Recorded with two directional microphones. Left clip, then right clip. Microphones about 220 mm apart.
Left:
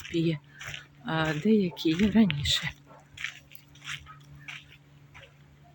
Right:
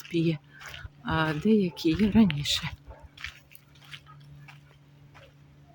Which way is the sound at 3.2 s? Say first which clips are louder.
Left 4 dB; centre (ahead or behind).